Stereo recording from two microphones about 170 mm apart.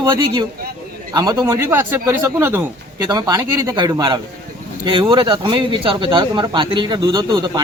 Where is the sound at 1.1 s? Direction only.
20° right (ahead or behind).